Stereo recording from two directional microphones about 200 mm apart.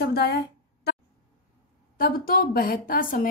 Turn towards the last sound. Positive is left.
turn(degrees=45)  # may be behind; listen again after turning